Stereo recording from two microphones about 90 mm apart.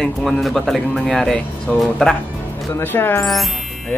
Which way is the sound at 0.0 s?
5° left (ahead or behind).